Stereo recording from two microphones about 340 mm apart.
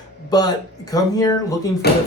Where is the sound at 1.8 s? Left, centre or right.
Left.